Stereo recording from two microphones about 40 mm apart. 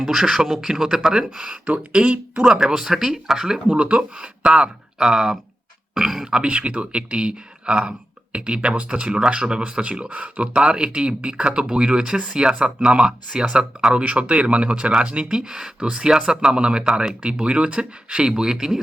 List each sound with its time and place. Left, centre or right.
0.0 s speech: centre
1.9 s speech: right
2.4 s speech: centre
3.7 s speech: right
5.9 s a sound: centre
6.3 s speech: right
10.6 s speech: right
13.9 s speech: right
15.3 s speech: centre